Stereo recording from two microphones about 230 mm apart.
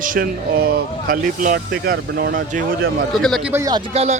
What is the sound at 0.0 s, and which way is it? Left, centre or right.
A man's voice, right.